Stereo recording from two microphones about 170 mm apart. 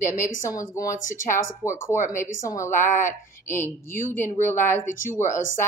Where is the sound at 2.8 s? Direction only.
15° left (ahead or behind).